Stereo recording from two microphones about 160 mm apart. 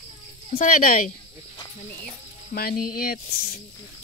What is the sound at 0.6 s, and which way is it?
Speech, 55° left (ahead or behind).